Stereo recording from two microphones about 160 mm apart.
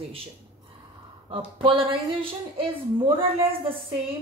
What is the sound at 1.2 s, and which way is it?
Speech, 35° right (ahead or behind).